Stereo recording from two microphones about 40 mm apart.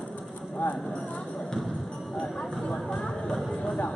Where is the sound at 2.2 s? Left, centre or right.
Centre.